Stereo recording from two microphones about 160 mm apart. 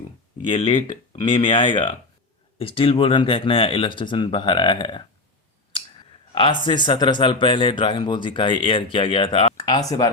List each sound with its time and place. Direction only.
0.4 s speech: 35° left (ahead or behind)
6.3 s speech: 30° left (ahead or behind)